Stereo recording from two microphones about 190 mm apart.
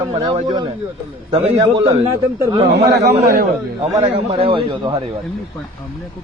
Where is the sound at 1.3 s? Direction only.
20° right (ahead or behind).